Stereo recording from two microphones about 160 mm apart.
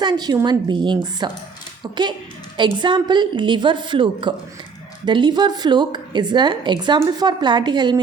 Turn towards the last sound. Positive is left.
turn(degrees=-30)  # may be behind; listen again after turning